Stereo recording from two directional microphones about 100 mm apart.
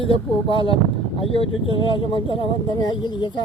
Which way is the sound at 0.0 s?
65° left (ahead or behind).